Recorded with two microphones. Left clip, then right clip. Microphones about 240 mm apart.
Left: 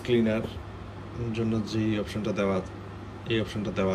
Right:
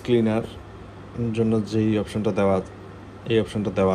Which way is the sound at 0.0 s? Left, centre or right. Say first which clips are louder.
Right 4 dB; centre.